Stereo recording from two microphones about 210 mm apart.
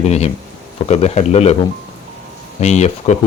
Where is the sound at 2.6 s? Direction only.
30° left (ahead or behind).